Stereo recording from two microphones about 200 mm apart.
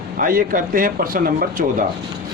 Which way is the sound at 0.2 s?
45° right (ahead or behind).